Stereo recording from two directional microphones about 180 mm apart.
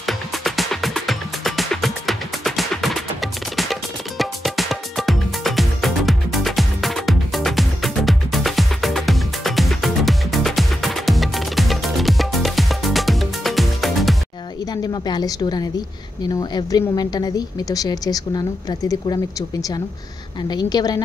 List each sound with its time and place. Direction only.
0.0 s music: centre (ahead or behind)
14.7 s a sound: 20° left (ahead or behind)
16.3 s a woman's voice: 20° left (ahead or behind)
20.4 s a woman's voice: 20° left (ahead or behind)